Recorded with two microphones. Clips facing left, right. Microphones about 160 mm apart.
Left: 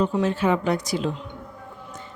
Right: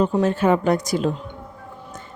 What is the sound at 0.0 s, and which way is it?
A woman's voice, 45° right (ahead or behind).